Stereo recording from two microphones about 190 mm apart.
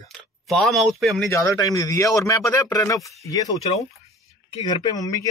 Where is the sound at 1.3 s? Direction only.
15° left (ahead or behind).